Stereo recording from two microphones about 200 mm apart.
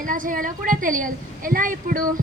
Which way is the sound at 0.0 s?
40° right (ahead or behind).